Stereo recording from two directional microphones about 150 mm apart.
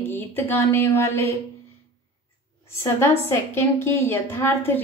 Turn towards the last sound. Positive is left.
turn(degrees=15)  # may be behind; listen again after turning